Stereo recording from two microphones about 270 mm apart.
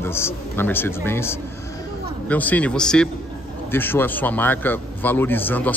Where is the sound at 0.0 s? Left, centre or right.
Centre.